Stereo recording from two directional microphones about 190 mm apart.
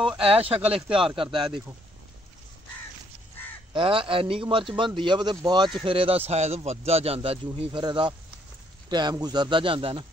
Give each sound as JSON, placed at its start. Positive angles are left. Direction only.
{"t": 0.2, "sound": "a man's voice", "side_deg": -30}
{"t": 3.7, "sound": "a man's voice", "side_deg": -30}